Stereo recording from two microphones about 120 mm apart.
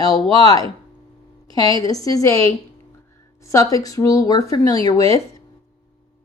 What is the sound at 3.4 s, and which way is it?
A woman's voice, 30° left (ahead or behind).